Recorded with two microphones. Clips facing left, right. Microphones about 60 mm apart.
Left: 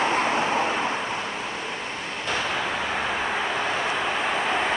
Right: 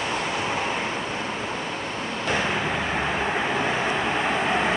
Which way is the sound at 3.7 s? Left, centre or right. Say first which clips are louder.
Right 1 dB; centre.